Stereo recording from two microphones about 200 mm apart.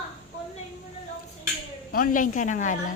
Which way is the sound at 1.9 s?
45° left (ahead or behind).